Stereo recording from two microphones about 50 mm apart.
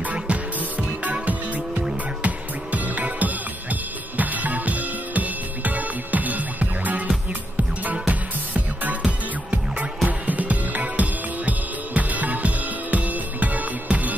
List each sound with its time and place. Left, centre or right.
0.0 s music: right